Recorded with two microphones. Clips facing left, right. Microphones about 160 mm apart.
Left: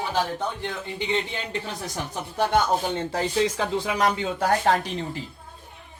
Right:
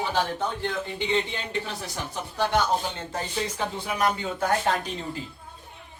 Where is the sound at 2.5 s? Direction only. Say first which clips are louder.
Left 3 dB; 65° left (ahead or behind); by 4.5 s 85° left.